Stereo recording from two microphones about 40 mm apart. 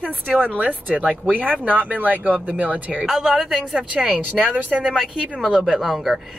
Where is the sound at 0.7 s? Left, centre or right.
Left.